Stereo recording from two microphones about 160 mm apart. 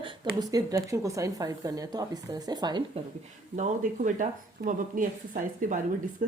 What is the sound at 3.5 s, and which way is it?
Speech, 50° right (ahead or behind).